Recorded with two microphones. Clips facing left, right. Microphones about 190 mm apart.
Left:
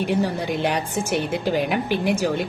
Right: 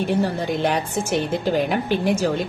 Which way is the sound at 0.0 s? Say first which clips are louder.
Right 1 dB; 15° left (ahead or behind).